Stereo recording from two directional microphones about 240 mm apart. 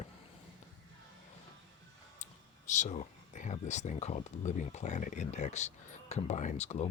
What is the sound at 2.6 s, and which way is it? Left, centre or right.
Speech, left.